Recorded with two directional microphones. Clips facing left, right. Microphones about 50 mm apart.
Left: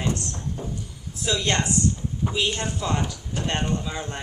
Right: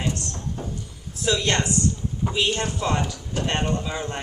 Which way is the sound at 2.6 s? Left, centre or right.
Right.